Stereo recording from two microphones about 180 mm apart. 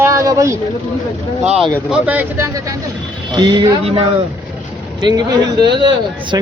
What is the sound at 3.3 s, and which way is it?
Speech, 25° right (ahead or behind).